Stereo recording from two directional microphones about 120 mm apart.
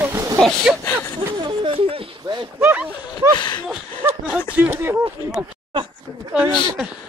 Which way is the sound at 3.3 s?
40° left (ahead or behind).